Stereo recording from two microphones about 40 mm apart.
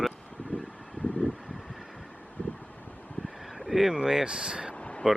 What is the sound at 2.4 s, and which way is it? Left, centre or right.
Vehicle, left.